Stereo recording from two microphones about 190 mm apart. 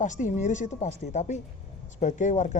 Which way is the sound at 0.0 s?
40° left (ahead or behind).